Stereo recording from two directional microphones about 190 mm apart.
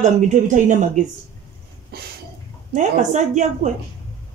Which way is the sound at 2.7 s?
40° right (ahead or behind).